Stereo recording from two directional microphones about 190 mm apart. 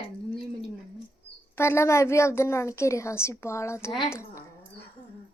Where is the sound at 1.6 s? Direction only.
15° left (ahead or behind).